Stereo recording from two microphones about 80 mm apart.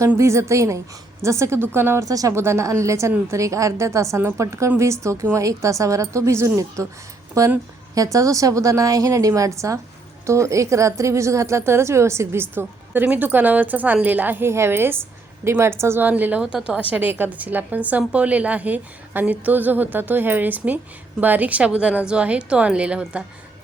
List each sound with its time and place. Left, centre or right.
0.2 s a woman's voice: right
2.0 s a woman's voice: right
2.3 s a woman's voice: right
16.4 s a woman's voice: centre